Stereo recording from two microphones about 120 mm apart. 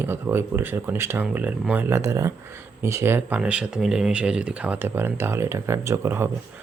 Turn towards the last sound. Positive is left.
turn(degrees=-20)  # may be behind; listen again after turning